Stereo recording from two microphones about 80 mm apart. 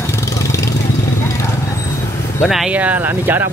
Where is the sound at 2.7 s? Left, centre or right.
Right.